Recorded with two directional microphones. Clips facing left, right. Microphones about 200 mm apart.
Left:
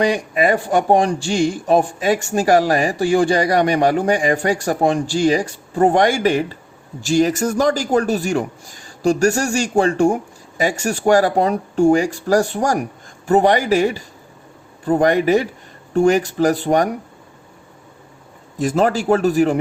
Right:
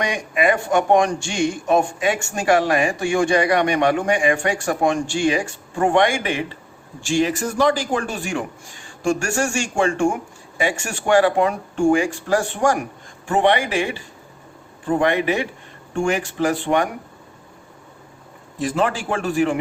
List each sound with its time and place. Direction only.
0.0 s speech: 35° left (ahead or behind)
18.6 s speech: 40° left (ahead or behind)